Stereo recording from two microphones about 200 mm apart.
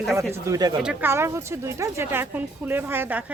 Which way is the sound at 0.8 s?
5° right (ahead or behind).